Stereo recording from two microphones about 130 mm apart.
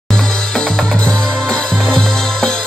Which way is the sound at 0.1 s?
5° left (ahead or behind).